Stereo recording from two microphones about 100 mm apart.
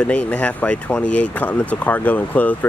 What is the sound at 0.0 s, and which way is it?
Speech, 15° left (ahead or behind).